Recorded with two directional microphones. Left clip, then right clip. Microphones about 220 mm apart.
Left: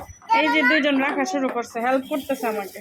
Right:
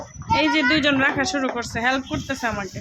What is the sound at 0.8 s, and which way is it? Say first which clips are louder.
Speech: right 2 dB; 5° right (ahead or behind).